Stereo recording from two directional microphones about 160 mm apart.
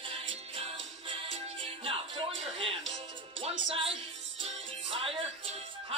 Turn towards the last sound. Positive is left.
turn(degrees=-40)  # may be behind; listen again after turning